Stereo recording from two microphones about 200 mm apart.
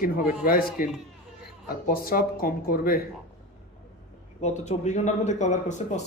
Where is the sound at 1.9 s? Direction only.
45° left (ahead or behind).